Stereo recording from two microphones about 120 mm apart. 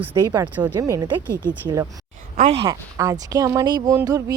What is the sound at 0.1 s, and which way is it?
Speech, 30° right (ahead or behind).